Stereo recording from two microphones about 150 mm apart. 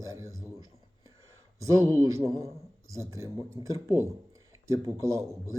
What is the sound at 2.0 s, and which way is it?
Speech, 20° right (ahead or behind).